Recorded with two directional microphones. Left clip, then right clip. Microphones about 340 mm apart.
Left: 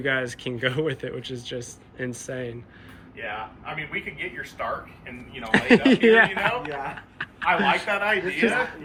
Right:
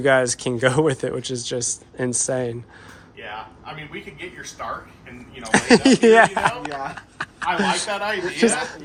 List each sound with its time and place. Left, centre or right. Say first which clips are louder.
0.0 s speech: right 8 dB; centre
4.6 s speech: even; centre
7.2 s chuckle: even; centre
7.9 s speech: left 1 dB; centre